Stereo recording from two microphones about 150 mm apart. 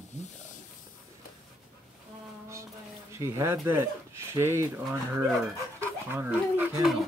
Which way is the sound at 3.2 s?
15° right (ahead or behind).